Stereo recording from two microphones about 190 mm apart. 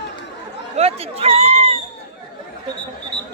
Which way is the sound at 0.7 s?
30° right (ahead or behind).